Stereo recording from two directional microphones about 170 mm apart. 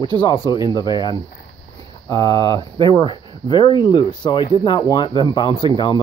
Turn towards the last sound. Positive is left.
turn(degrees=25)  # may be behind; listen again after turning